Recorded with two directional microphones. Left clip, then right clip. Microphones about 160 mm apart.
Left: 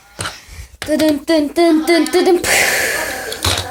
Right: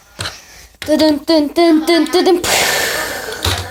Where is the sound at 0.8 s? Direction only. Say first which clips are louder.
Right 2 dB; 10° right (ahead or behind).